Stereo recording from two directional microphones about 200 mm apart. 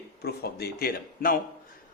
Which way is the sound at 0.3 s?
50° left (ahead or behind).